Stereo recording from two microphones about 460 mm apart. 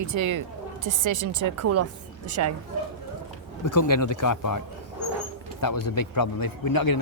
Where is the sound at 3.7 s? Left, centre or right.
Left.